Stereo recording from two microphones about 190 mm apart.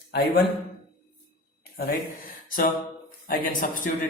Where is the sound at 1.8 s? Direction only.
50° left (ahead or behind).